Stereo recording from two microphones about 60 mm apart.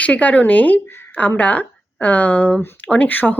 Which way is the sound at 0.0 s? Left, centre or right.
Left.